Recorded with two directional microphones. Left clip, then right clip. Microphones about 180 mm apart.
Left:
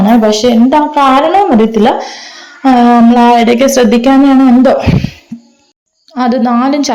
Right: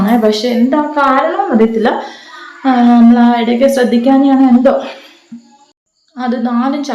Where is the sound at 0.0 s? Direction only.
25° left (ahead or behind).